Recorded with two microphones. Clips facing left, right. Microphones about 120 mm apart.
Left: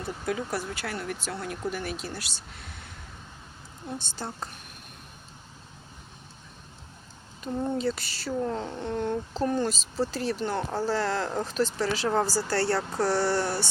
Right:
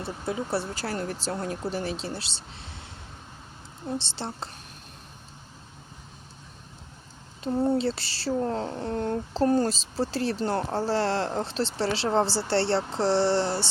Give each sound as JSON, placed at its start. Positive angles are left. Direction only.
{"t": 0.0, "sound": "speech", "side_deg": -25}
{"t": 7.4, "sound": "speech", "side_deg": -35}